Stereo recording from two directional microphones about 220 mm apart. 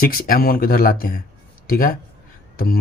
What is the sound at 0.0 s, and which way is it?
Speech, 40° left (ahead or behind).